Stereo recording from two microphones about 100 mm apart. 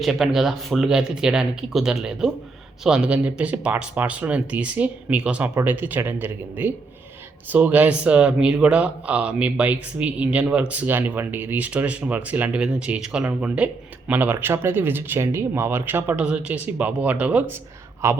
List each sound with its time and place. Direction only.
0.0 s speech: centre (ahead or behind); by 18.2 s 25° right (ahead or behind)